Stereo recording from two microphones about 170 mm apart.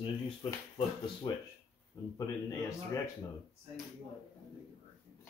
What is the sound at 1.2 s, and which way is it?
Speech, 25° left (ahead or behind).